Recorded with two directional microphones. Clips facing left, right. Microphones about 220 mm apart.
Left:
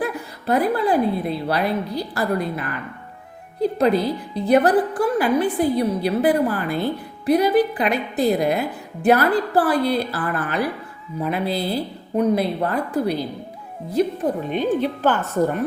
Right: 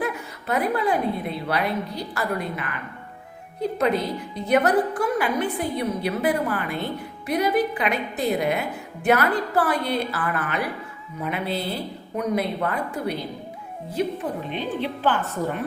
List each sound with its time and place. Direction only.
0.0 s a woman's voice: 35° left (ahead or behind)